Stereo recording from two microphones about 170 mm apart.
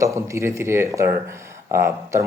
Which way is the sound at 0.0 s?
15° right (ahead or behind).